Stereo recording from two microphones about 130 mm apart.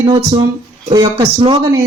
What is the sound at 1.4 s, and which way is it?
Speech, 50° right (ahead or behind).